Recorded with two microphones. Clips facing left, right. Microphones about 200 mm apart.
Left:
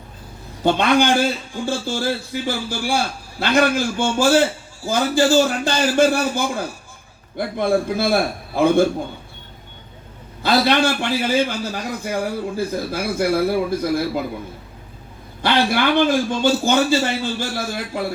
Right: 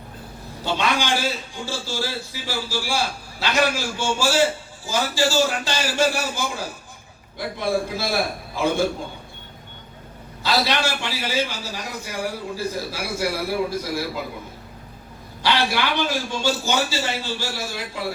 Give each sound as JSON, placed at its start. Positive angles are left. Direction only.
{"t": 0.6, "sound": "a man's voice", "side_deg": 55}
{"t": 10.4, "sound": "a man's voice", "side_deg": 55}
{"t": 15.4, "sound": "a man's voice", "side_deg": 55}